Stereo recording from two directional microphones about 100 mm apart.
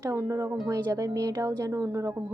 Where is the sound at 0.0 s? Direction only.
30° right (ahead or behind).